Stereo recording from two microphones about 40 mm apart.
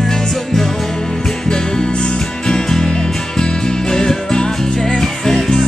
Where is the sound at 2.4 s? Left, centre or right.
Centre.